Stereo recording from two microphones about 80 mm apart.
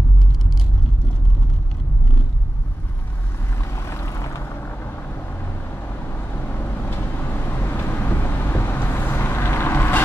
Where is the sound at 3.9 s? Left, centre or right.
Left.